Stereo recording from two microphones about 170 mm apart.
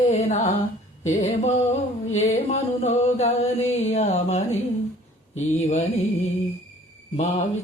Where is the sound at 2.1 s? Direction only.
40° left (ahead or behind).